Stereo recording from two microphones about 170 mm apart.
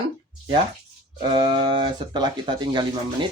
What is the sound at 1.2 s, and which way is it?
Speech, 25° right (ahead or behind).